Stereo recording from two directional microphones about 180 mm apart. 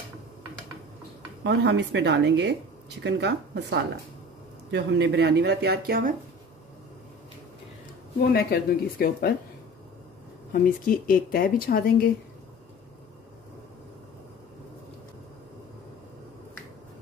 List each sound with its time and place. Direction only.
1.4 s speech: 70° right (ahead or behind); by 6.1 s 55° right (ahead or behind)
8.3 s speech: 60° left (ahead or behind)
10.5 s speech: 50° left (ahead or behind)